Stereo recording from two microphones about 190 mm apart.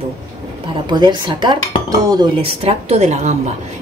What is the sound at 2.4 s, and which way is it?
Speech, 30° right (ahead or behind).